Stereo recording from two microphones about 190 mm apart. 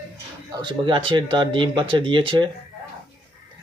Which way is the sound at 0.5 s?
25° right (ahead or behind).